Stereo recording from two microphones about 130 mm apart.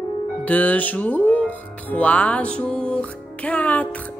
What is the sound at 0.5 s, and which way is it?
Music, 10° left (ahead or behind).